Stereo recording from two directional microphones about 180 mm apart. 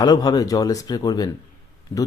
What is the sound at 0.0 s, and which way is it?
Speech, 20° left (ahead or behind).